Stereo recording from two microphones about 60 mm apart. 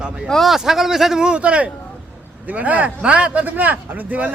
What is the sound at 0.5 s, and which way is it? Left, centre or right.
A man's voice, centre.